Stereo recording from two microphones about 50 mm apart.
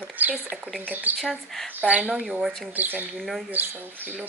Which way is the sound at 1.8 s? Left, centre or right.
Right.